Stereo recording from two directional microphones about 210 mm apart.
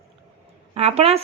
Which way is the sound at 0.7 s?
30° right (ahead or behind).